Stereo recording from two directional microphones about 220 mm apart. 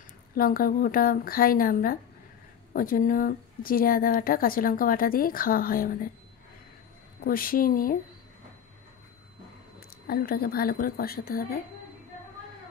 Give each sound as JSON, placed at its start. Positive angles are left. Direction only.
{"t": 0.4, "sound": "a woman's voice", "side_deg": 40}
{"t": 7.2, "sound": "a woman's voice", "side_deg": 40}
{"t": 9.8, "sound": "a woman's voice", "side_deg": 45}